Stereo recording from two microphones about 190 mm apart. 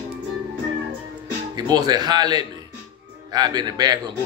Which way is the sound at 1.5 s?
20° right (ahead or behind).